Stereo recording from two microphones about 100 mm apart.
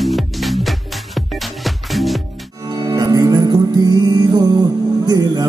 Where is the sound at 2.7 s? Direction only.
40° right (ahead or behind).